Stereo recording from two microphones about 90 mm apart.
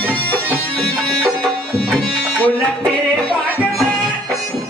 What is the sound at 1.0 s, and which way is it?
Music, 10° left (ahead or behind).